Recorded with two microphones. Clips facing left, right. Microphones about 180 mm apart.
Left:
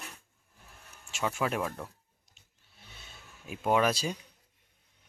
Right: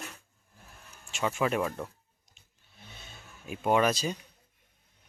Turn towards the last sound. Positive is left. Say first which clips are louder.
# right 1 dB
turn(degrees=5)  # may be behind; listen again after turning